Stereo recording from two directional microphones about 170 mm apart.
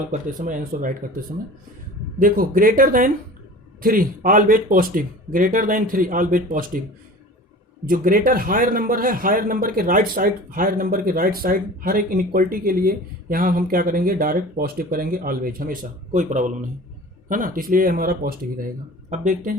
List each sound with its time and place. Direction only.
0.1 s a man's voice: 50° right (ahead or behind)
7.9 s a man's voice: 55° right (ahead or behind)